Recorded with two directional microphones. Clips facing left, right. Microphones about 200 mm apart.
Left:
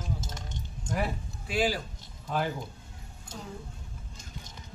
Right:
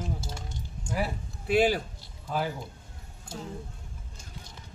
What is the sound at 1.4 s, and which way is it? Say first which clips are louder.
Speech: right 5 dB; 60° right (ahead or behind).